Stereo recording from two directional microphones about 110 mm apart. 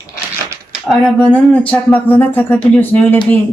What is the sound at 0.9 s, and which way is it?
Speech, 10° left (ahead or behind).